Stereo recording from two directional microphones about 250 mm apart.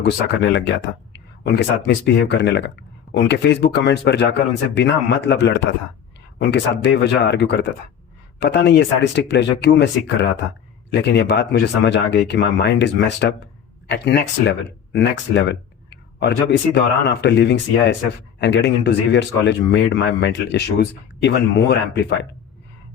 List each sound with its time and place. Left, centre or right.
0.0 s speech: left